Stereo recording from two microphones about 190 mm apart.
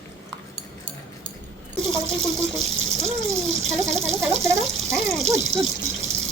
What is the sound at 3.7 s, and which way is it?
Speech, centre (ahead or behind).